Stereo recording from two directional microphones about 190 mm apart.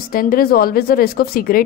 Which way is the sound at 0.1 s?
50° left (ahead or behind).